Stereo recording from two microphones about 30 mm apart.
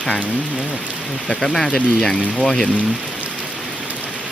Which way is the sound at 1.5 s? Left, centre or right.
Centre.